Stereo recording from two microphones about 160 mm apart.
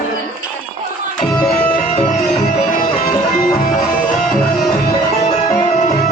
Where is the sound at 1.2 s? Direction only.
5° left (ahead or behind).